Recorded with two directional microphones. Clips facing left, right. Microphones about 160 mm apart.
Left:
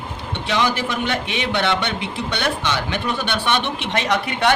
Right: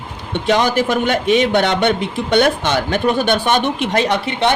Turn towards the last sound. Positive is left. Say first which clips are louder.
# right 2 dB
turn(degrees=-25)  # may be behind; listen again after turning